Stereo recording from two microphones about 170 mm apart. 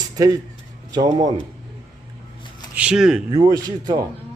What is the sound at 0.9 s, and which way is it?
Speech, 25° right (ahead or behind).